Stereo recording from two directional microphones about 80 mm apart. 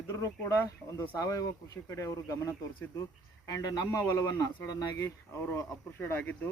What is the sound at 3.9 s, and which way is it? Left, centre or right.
Speech, left.